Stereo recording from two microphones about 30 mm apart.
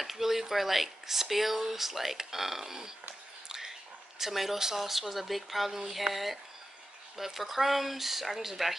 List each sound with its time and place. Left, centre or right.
0.0 s speech: centre
3.4 s a sound: centre
4.2 s speech: centre